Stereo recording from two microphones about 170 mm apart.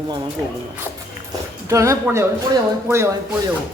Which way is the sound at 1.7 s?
15° right (ahead or behind).